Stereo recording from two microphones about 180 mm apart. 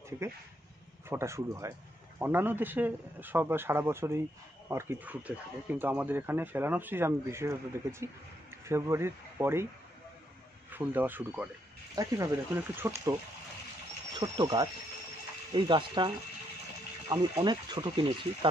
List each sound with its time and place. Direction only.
1.0 s speech: 15° right (ahead or behind)
10.7 s speech: 10° right (ahead or behind)
14.2 s speech: 25° right (ahead or behind)
17.1 s speech: 25° right (ahead or behind)